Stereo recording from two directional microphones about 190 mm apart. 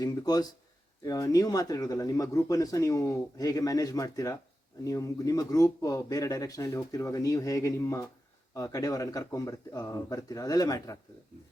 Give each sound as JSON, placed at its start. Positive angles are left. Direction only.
{"t": 0.0, "sound": "speech", "side_deg": 20}